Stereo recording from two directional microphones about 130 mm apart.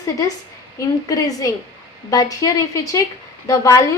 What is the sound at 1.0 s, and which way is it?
A woman's voice, 25° left (ahead or behind).